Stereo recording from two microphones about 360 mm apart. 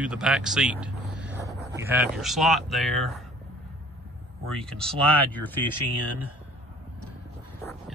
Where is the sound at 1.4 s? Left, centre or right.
Centre.